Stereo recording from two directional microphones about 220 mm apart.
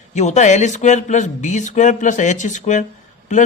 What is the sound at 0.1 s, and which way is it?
Speech, 30° left (ahead or behind).